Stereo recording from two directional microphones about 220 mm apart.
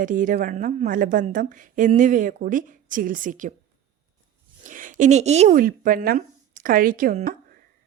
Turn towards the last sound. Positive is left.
turn(degrees=-35)  # may be behind; listen again after turning